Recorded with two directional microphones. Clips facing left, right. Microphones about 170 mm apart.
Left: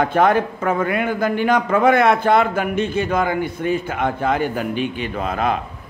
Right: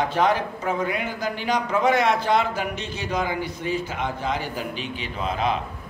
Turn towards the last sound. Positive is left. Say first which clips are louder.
# left 4 dB
turn(degrees=50)  # may be behind; listen again after turning